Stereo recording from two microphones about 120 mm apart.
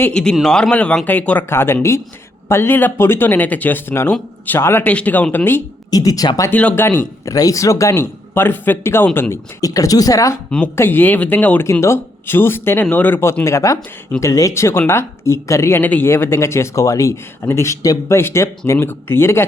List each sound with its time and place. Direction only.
0.1 s speech: 5° left (ahead or behind)
5.9 s speech: 30° left (ahead or behind)
6.5 s speech: 15° left (ahead or behind)
7.3 s speech: 30° left (ahead or behind)
9.3 s speech: 30° left (ahead or behind)
10.8 s speech: 15° left (ahead or behind)